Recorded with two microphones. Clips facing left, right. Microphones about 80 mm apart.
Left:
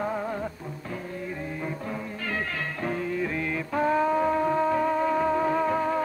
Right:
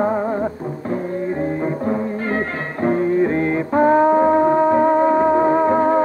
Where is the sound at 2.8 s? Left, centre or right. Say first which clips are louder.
Right 13 dB; right.